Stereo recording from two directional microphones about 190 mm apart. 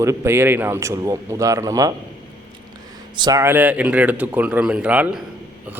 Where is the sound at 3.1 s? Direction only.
20° right (ahead or behind).